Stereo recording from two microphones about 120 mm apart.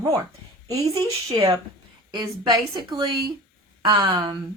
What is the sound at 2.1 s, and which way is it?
Speech, 35° right (ahead or behind).